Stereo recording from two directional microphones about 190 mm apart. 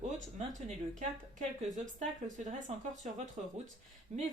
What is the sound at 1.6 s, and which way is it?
Speech, 40° right (ahead or behind).